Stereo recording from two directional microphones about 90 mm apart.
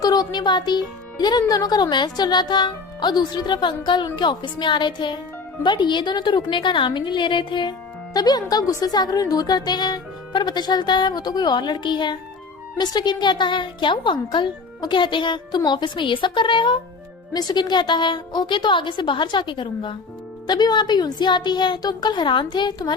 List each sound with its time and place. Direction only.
0.0 s a woman's voice: 45° left (ahead or behind); by 16.7 s 65° left (ahead or behind)
17.3 s a woman's voice: 50° left (ahead or behind)
20.5 s a woman's voice: 50° left (ahead or behind)